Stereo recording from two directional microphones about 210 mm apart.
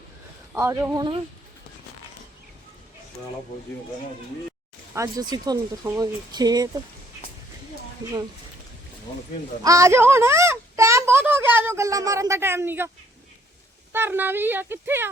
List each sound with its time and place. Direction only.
0.5 s speech: 10° right (ahead or behind)
4.9 s speech: 15° right (ahead or behind)
9.6 s a child's voice: 15° right (ahead or behind)
13.9 s speech: 10° right (ahead or behind)